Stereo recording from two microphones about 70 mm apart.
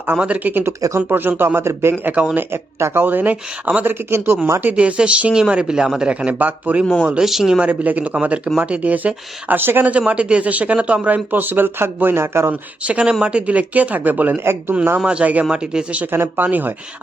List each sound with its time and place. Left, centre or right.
0.2 s a man's voice: right
2.1 s speech: right
2.5 s speech: right
4.1 s a man's voice: right
4.8 s speech: centre
7.0 s speech: centre
7.6 s speech: right
10.1 s speech: centre; by 12.5 s right
12.8 s speech: centre; by 14.8 s right
14.9 s speech: centre
16.1 s speech: right